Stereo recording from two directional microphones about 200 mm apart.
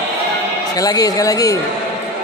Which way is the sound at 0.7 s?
20° left (ahead or behind).